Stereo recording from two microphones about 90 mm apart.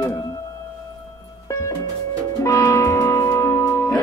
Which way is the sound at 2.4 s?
35° left (ahead or behind).